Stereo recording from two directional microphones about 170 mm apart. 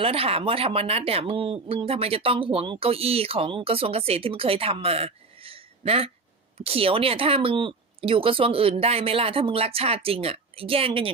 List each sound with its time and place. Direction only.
0.0 s speech: 35° right (ahead or behind)